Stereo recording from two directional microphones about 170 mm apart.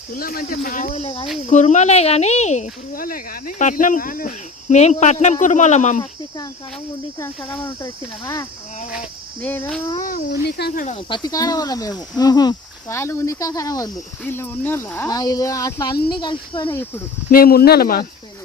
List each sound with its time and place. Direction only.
0.1 s speech: 60° left (ahead or behind); by 2.6 s 40° left (ahead or behind)
2.9 s speech: 55° left (ahead or behind)
7.2 s cricket: 15° left (ahead or behind)
7.6 s speech: 25° left (ahead or behind)
9.4 s cricket: 10° left (ahead or behind)
10.0 s speech: 55° left (ahead or behind)
10.4 s speech: 70° left (ahead or behind)
10.8 s speech: 30° left (ahead or behind)
17.3 s speech: 60° left (ahead or behind)